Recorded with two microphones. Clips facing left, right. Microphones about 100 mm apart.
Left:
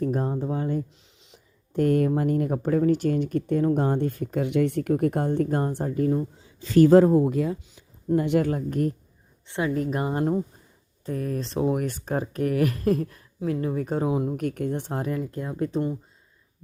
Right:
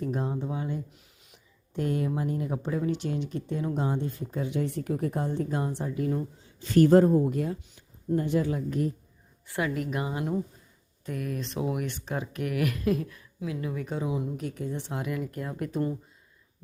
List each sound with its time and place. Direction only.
0.0 s speech: 45° left (ahead or behind)
0.9 s a sound: 25° left (ahead or behind)
1.7 s speech: 50° left (ahead or behind)
8.1 s speech: 80° left
8.4 s speech: 50° left (ahead or behind)
9.5 s speech: 25° left (ahead or behind)